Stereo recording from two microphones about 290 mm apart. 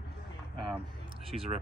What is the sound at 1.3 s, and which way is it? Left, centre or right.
Speech, centre.